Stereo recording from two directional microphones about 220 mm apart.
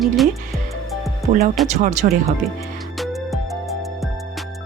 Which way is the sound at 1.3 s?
30° right (ahead or behind).